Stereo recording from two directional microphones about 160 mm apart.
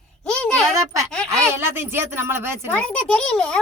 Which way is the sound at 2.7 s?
5° left (ahead or behind).